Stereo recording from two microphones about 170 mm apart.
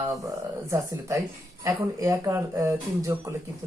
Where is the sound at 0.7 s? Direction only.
15° right (ahead or behind).